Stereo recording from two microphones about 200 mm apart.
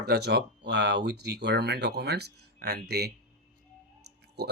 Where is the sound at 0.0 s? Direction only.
55° right (ahead or behind).